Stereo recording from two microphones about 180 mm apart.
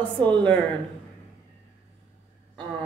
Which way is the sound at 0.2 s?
10° left (ahead or behind).